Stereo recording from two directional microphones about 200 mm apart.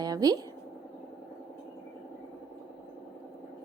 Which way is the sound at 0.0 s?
20° right (ahead or behind).